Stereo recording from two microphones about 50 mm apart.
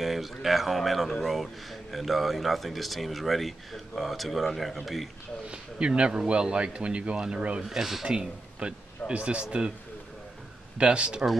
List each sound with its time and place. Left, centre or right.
0.0 s speech: centre
5.5 s speech: centre
10.8 s speech: centre